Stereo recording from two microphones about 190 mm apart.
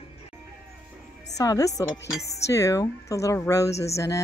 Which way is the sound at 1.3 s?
20° left (ahead or behind).